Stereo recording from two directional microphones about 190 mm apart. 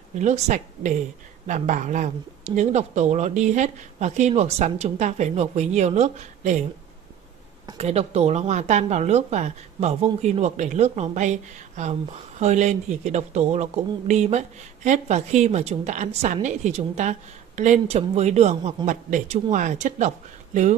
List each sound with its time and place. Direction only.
0.2 s speech: 40° right (ahead or behind)
7.7 s speech: 35° right (ahead or behind)